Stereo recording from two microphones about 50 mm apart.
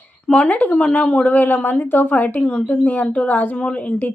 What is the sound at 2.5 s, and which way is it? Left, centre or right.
Speech, left.